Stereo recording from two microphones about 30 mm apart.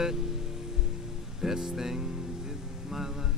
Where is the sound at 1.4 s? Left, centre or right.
Centre.